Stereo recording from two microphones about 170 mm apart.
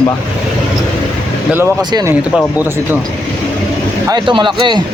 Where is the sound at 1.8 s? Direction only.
25° right (ahead or behind).